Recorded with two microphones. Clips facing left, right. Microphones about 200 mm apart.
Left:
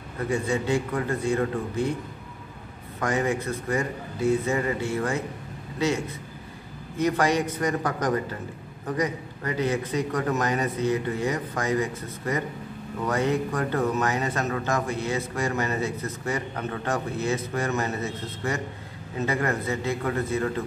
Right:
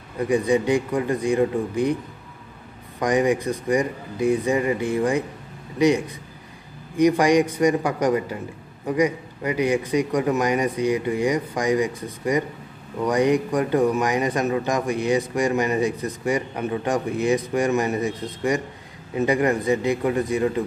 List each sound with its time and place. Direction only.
0.3 s a man's voice: 15° right (ahead or behind)
3.0 s a man's voice: 15° right (ahead or behind)